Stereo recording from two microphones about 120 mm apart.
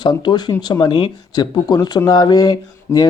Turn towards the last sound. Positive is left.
turn(degrees=35)  # may be behind; listen again after turning